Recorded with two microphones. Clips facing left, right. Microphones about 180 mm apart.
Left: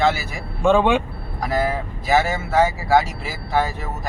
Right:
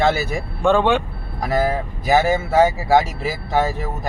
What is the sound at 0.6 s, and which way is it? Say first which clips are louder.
Speech: even; 5° left (ahead or behind).